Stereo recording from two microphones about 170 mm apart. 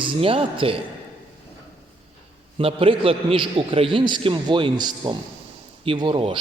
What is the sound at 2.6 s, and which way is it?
A man's voice, 35° right (ahead or behind).